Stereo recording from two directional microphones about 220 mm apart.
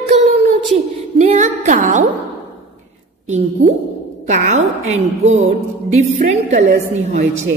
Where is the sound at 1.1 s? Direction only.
30° right (ahead or behind).